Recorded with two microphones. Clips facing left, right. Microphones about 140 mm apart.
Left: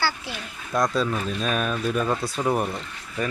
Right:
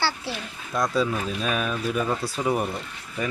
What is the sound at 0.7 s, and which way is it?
Speech, 10° right (ahead or behind).